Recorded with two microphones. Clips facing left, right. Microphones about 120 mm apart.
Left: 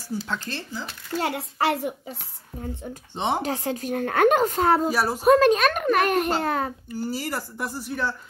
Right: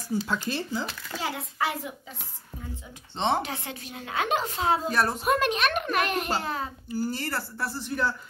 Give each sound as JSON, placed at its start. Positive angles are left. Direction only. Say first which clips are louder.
{"t": 0.1, "sound": "speech", "louder": "right 2 dB", "side_deg": -10}
{"t": 1.2, "sound": "a woman's voice", "louder": "left 5 dB", "side_deg": 70}
{"t": 3.2, "sound": "speech", "louder": "even", "side_deg": 10}
{"t": 3.4, "sound": "a child's voice", "louder": "left 10 dB", "side_deg": 40}
{"t": 4.8, "sound": "speech", "louder": "left 2 dB", "side_deg": 5}
{"t": 5.2, "sound": "a child's voice", "louder": "left 8 dB", "side_deg": 35}
{"t": 6.9, "sound": "speech", "louder": "left 1 dB", "side_deg": 0}
{"t": 7.8, "sound": "speech", "louder": "right 1 dB", "side_deg": 0}